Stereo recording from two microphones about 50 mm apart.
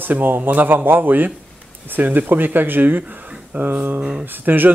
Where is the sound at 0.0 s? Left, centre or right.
Right.